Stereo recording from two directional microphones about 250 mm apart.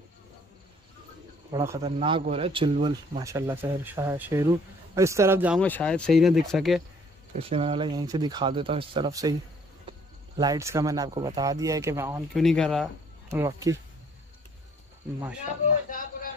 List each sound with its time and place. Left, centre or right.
1.5 s speech: centre
1.8 s speech: right
5.6 s speech: centre
7.3 s speech: right
12.4 s speech: centre
13.5 s speech: centre